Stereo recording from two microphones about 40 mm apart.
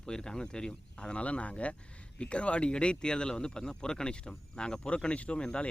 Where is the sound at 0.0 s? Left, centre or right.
Centre.